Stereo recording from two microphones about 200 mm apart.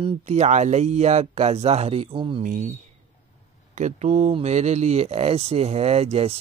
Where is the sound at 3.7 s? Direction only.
35° right (ahead or behind).